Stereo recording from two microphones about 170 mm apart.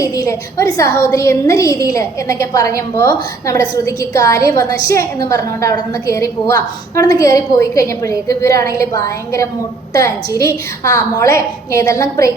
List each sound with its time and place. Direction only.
0.0 s a woman's voice: 20° left (ahead or behind)